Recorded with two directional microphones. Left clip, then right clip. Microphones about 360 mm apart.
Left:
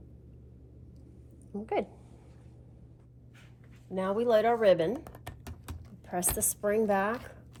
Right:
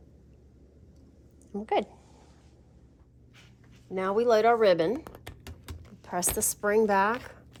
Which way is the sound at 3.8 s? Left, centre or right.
Centre.